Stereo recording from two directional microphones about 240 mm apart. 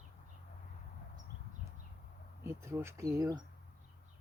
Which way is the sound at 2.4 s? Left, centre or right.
Centre.